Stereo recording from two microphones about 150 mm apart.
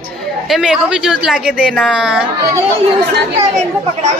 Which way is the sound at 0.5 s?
5° right (ahead or behind).